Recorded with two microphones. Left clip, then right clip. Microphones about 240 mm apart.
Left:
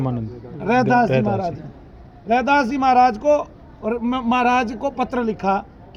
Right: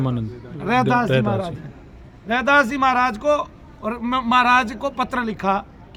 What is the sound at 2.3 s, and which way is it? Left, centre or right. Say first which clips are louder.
Speech: even; centre.